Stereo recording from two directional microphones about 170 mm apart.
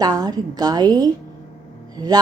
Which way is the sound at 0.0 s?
20° right (ahead or behind).